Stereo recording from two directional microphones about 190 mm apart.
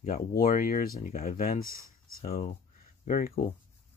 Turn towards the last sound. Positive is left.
turn(degrees=45)  # may be behind; listen again after turning